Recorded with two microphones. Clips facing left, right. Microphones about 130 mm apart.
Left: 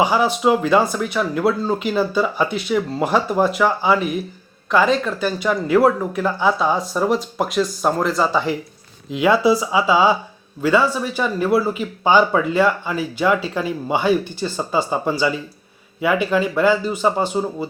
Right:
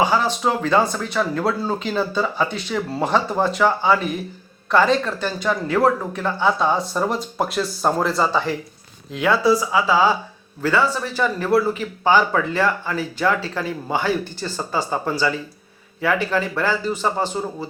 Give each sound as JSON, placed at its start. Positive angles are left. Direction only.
{"t": 0.0, "sound": "a man's voice", "side_deg": 10}
{"t": 9.1, "sound": "a man's voice", "side_deg": 15}